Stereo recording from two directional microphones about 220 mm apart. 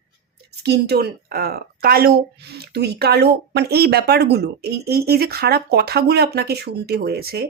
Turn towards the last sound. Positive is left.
turn(degrees=-45)  # may be behind; listen again after turning